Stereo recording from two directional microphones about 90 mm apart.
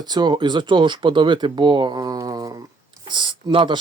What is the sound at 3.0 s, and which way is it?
Speech, 60° right (ahead or behind).